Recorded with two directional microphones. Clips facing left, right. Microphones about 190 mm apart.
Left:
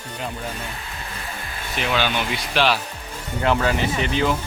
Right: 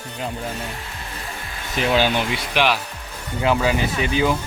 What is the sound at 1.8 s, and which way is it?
Speech, 40° right (ahead or behind).